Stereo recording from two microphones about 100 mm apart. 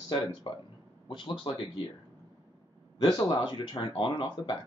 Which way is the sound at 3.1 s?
45° left (ahead or behind).